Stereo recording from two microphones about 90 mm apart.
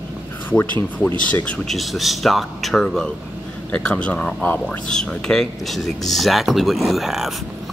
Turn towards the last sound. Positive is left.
turn(degrees=-5)  # may be behind; listen again after turning